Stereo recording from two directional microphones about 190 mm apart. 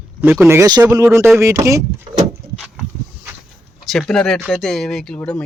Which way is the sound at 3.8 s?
Centre (ahead or behind).